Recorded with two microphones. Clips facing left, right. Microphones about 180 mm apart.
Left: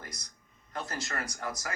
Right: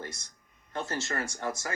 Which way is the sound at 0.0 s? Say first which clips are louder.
Right 6 dB; 25° right (ahead or behind).